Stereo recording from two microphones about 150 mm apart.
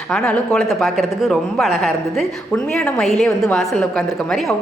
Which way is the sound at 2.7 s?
5° left (ahead or behind).